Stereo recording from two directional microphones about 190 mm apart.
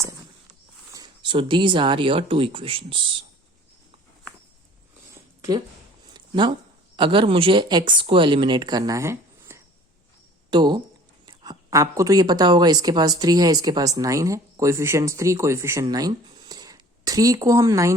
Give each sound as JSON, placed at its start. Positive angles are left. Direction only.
{"t": 0.9, "sound": "speech", "side_deg": -25}
{"t": 6.1, "sound": "speech", "side_deg": -25}